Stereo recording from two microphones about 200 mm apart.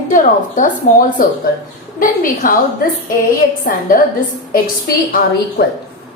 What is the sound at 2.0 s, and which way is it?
Speech, 45° left (ahead or behind).